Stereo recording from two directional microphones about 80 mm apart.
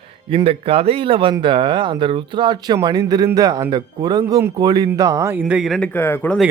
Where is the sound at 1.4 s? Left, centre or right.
Right.